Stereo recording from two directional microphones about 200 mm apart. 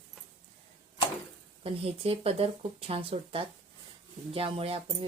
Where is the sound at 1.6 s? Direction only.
30° right (ahead or behind).